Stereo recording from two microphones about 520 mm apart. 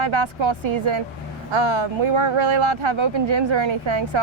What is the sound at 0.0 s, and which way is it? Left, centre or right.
Speech, right.